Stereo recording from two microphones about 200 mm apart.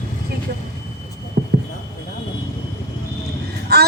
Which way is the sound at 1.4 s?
50° right (ahead or behind).